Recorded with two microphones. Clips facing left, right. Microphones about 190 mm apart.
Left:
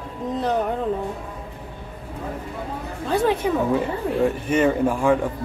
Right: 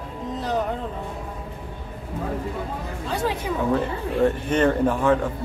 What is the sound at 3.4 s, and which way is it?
Speech, 55° left (ahead or behind).